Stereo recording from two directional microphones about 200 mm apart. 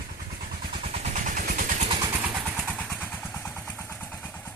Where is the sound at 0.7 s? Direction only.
30° right (ahead or behind).